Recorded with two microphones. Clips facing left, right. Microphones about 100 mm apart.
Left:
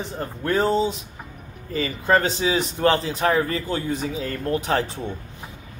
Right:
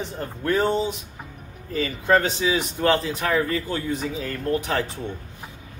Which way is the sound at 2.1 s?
35° left (ahead or behind).